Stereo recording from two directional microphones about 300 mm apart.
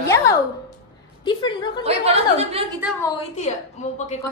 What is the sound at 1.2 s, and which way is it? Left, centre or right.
Speech, centre.